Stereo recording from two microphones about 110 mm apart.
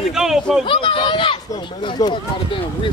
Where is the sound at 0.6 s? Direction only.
50° left (ahead or behind).